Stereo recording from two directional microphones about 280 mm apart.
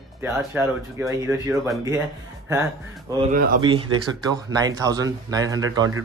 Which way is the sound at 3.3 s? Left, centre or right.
Right.